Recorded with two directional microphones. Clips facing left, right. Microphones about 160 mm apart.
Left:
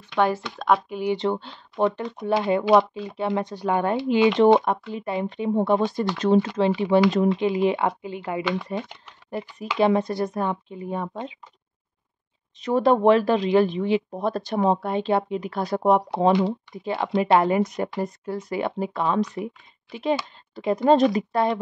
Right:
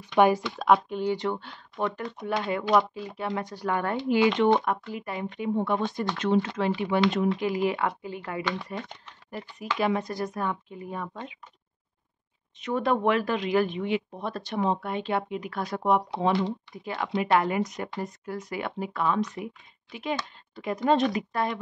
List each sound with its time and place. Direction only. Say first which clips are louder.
0.1 s speech: right 2 dB; 15° right (ahead or behind)
0.7 s speech: even; 5° left (ahead or behind)
1.1 s speech: left 5 dB; 25° left (ahead or behind)
12.5 s speech: left 6 dB; 35° left (ahead or behind)